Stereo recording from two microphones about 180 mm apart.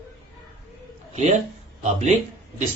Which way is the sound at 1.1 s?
40° right (ahead or behind).